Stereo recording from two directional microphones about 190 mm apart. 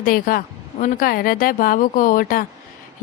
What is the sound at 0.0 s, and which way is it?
Speech, 50° left (ahead or behind).